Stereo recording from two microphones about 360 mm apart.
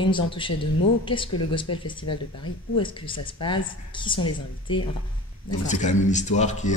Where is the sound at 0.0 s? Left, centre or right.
Centre.